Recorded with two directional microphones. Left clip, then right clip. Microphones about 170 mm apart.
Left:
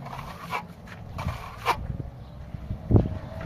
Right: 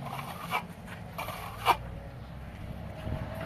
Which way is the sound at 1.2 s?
Centre (ahead or behind).